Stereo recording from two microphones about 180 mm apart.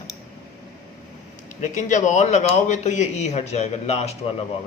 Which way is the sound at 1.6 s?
45° left (ahead or behind).